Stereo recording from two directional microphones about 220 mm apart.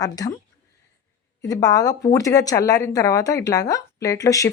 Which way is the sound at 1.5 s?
15° left (ahead or behind).